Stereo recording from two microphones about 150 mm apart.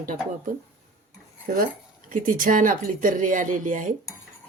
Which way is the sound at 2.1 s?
65° right (ahead or behind).